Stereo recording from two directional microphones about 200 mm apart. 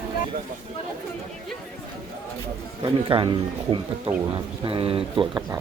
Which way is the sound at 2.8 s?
25° right (ahead or behind).